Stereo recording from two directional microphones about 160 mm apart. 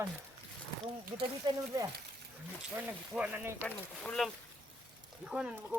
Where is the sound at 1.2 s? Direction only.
25° right (ahead or behind).